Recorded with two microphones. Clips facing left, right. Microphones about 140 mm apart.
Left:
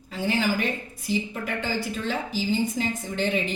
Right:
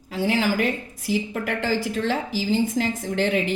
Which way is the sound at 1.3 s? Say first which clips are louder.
Right 4 dB; 80° right.